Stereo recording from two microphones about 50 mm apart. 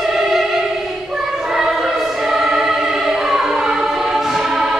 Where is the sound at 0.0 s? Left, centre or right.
Centre.